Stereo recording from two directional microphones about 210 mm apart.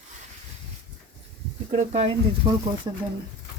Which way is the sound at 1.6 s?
35° right (ahead or behind).